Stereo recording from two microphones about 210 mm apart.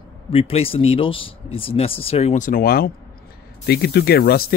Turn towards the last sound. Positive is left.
turn(degrees=50)  # may be behind; listen again after turning